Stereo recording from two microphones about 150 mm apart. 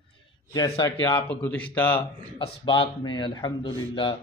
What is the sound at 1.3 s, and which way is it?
Speech, 10° left (ahead or behind).